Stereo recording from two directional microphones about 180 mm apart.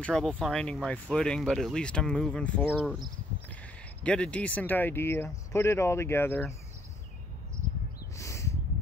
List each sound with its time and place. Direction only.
0.0 s speech: 5° left (ahead or behind)
4.0 s speech: 5° left (ahead or behind)
8.2 s a sound: 15° left (ahead or behind)